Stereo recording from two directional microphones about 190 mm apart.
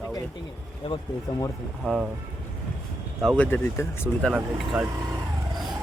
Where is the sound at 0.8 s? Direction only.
20° left (ahead or behind).